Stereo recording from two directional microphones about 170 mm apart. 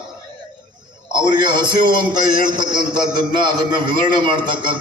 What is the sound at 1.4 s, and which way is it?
A man's voice, 25° right (ahead or behind).